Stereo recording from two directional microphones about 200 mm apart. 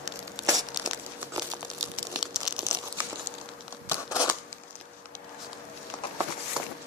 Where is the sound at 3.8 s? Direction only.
15° left (ahead or behind).